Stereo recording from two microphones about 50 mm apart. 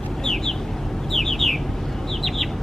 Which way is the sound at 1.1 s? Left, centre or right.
Centre.